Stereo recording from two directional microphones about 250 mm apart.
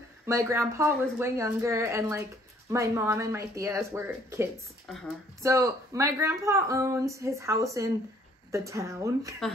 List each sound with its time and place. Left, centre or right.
0.3 s speech: centre